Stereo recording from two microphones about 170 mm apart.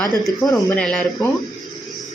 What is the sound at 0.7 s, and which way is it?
Speech, 5° left (ahead or behind).